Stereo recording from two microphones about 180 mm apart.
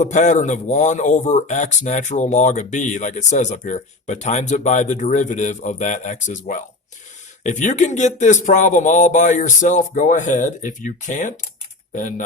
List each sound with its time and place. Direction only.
0.0 s speech: 40° left (ahead or behind)